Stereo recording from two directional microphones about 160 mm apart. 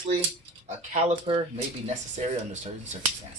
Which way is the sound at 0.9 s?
45° right (ahead or behind).